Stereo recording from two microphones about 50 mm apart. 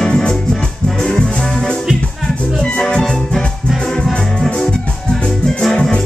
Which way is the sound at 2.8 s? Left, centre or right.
Centre.